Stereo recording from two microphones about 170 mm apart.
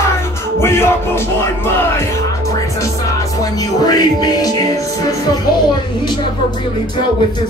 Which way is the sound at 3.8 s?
20° left (ahead or behind).